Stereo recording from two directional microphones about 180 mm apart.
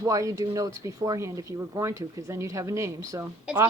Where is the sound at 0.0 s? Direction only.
20° right (ahead or behind).